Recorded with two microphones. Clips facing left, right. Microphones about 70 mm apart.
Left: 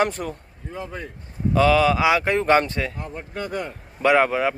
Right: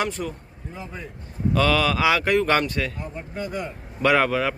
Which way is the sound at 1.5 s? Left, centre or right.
Centre.